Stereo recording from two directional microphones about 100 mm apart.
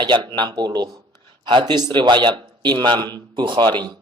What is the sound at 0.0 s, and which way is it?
Speech, 50° right (ahead or behind).